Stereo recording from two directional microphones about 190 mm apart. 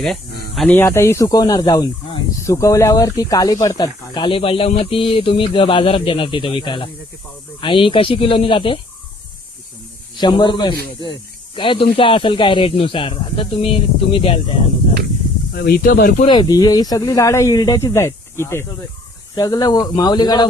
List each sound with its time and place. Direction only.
0.5 s speech: 5° left (ahead or behind); by 8.8 s 25° left (ahead or behind)
10.2 s speech: 25° left (ahead or behind)
15.5 s speech: 55° left (ahead or behind)
16.2 s speech: 25° left (ahead or behind)